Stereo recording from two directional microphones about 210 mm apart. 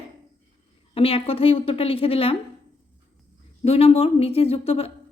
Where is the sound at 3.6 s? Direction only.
30° left (ahead or behind).